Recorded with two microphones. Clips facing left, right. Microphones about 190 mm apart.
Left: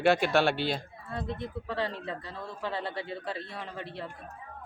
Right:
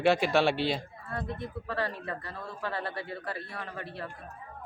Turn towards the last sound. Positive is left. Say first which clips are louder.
# even
turn(degrees=20)  # may be behind; listen again after turning